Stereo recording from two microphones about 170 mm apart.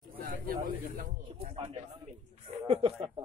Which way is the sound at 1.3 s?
35° right (ahead or behind).